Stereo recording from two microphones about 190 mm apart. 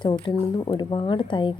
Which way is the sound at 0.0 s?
20° left (ahead or behind).